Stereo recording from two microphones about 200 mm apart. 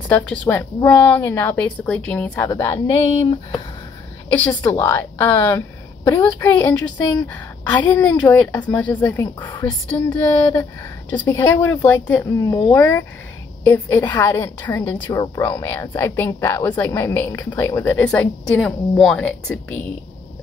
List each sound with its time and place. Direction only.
0.1 s a woman's voice: 5° left (ahead or behind)
2.9 s speech: 30° left (ahead or behind)
4.3 s a woman's voice: 10° left (ahead or behind)
7.7 s a woman's voice: 10° left (ahead or behind)